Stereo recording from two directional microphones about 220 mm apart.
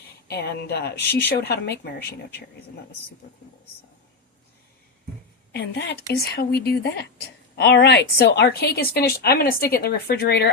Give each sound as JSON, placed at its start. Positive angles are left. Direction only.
{"t": 0.3, "sound": "a woman's voice", "side_deg": 50}
{"t": 5.5, "sound": "a woman's voice", "side_deg": 50}